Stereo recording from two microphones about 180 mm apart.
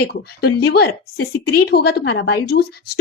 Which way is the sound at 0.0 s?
60° left (ahead or behind).